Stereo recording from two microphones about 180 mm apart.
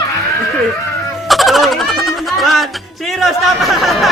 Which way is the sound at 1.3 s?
Centre (ahead or behind).